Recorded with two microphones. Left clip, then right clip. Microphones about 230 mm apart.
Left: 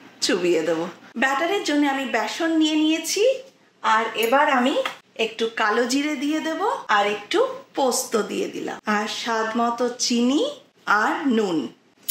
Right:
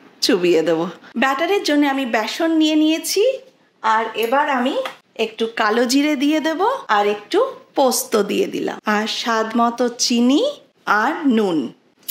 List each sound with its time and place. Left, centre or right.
0.2 s a woman's voice: right